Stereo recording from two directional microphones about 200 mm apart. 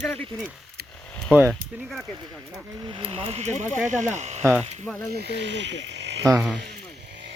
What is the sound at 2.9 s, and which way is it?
Speech, 25° right (ahead or behind).